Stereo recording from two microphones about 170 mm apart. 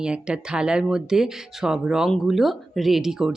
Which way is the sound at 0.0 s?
5° right (ahead or behind).